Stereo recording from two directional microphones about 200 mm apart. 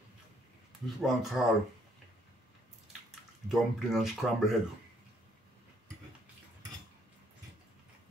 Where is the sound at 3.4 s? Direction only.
Centre (ahead or behind).